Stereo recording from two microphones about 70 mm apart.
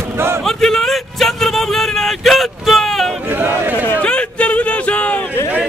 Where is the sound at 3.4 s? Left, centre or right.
Right.